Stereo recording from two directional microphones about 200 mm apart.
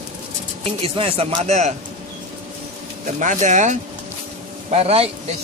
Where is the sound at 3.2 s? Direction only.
40° right (ahead or behind).